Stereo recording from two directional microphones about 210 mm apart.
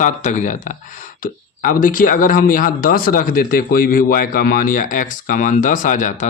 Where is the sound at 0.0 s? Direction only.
35° left (ahead or behind).